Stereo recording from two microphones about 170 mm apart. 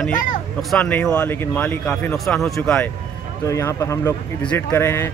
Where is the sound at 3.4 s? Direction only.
15° left (ahead or behind).